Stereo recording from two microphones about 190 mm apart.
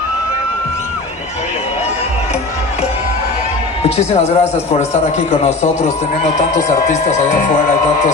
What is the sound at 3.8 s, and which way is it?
A man's voice, 35° left (ahead or behind).